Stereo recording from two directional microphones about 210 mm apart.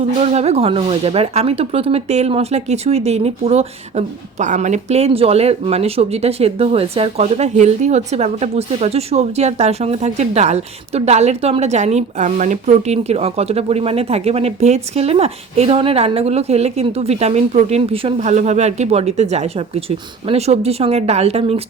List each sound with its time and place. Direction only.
0.2 s speech: 30° right (ahead or behind)